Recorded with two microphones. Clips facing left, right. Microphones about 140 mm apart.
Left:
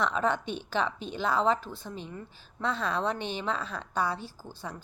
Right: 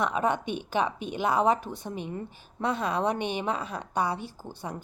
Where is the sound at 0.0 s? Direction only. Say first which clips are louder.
Right 1 dB; 10° right (ahead or behind).